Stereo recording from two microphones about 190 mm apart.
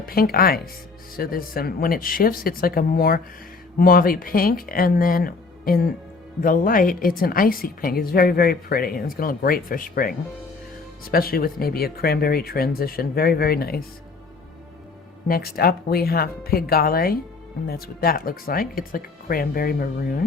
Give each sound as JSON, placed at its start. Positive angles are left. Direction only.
{"t": 0.0, "sound": "a woman's voice", "side_deg": 50}
{"t": 15.3, "sound": "a woman's voice", "side_deg": 55}